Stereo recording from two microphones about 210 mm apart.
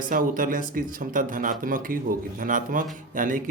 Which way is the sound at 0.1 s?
40° right (ahead or behind).